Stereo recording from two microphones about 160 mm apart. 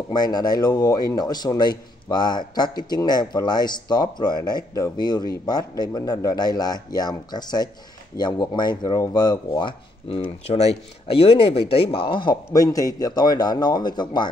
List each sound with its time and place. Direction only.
0.1 s speech: 25° left (ahead or behind)